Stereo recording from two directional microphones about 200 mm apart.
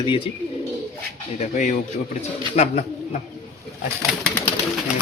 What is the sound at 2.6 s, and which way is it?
Speech, 35° left (ahead or behind).